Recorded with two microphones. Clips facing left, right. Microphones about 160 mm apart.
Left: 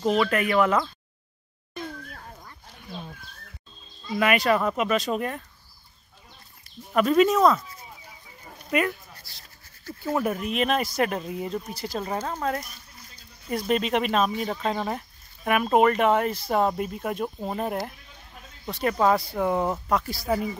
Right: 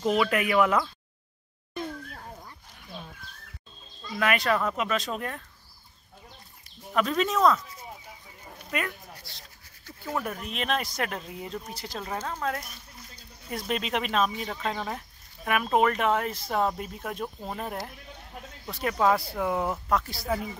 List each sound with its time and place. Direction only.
0.2 s speech: 5° right (ahead or behind)
4.2 s speech: 5° left (ahead or behind)
6.9 s speech: 5° left (ahead or behind)
8.6 s speech: 5° left (ahead or behind)
10.1 s speech: 5° left (ahead or behind)
13.5 s speech: centre (ahead or behind)